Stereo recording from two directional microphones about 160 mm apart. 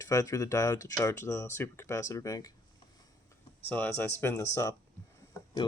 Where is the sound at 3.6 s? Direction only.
10° left (ahead or behind).